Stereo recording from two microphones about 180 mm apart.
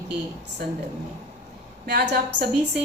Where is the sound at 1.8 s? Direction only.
65° right (ahead or behind).